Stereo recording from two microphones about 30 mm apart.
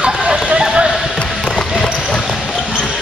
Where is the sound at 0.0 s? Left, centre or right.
Right.